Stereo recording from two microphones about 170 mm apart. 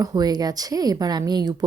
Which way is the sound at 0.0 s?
20° right (ahead or behind).